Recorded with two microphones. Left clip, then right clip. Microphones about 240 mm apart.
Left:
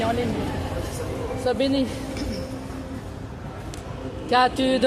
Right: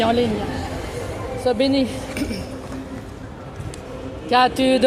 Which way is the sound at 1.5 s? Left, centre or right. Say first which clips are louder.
Right 4 dB; right.